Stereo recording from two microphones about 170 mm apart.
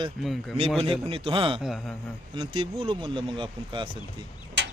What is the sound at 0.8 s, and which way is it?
Speech, 30° right (ahead or behind).